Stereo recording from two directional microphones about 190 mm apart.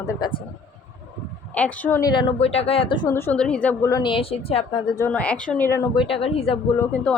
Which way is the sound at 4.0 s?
30° left (ahead or behind).